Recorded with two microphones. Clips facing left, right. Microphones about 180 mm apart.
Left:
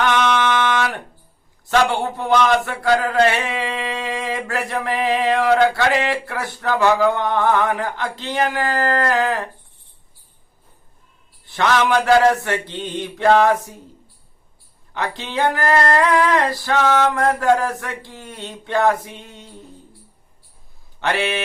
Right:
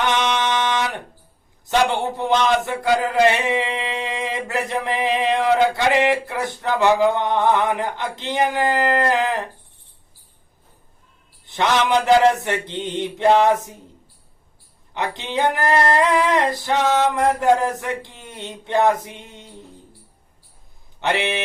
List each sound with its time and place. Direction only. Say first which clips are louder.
0.0 s a sound: left 3 dB; 20° right (ahead or behind)
1.7 s a man's voice: left 1 dB; 20° right (ahead or behind)
11.4 s a man's voice: left 1 dB; 20° right (ahead or behind)
14.9 s a man's voice: even; 20° right (ahead or behind)
21.0 s a man's voice: left 1 dB; 20° right (ahead or behind)